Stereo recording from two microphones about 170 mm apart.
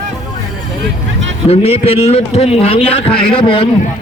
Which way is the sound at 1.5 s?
35° left (ahead or behind).